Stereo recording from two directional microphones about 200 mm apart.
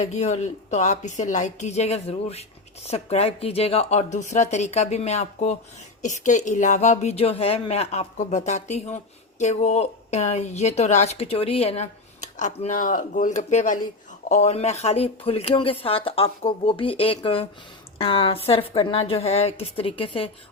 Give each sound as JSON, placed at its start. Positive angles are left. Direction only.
{"t": 0.0, "sound": "a woman's voice", "side_deg": 35}